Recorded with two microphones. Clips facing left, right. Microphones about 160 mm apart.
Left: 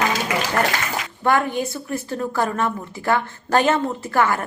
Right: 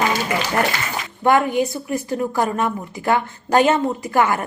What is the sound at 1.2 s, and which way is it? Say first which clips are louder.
A woman's voice: right 4 dB; 15° right (ahead or behind).